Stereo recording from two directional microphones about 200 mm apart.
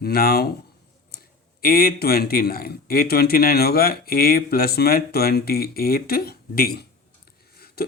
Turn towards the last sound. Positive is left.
turn(degrees=50)  # may be behind; listen again after turning